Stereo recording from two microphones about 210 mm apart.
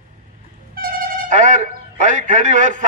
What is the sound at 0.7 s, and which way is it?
A man's voice, 45° right (ahead or behind).